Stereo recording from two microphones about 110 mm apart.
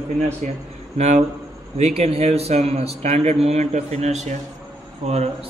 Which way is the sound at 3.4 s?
90° right.